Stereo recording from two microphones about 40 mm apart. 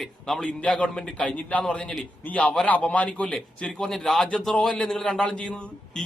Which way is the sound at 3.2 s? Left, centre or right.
Left.